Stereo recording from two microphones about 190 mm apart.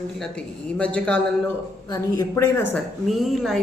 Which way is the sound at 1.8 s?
20° left (ahead or behind).